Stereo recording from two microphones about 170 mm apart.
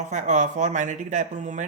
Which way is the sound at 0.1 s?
45° right (ahead or behind).